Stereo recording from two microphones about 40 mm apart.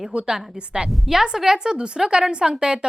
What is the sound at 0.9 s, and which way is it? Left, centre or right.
A woman's voice, centre.